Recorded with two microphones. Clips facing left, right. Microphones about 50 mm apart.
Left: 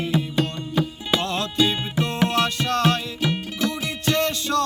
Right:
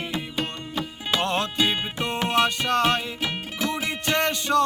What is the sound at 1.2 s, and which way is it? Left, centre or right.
Music, right.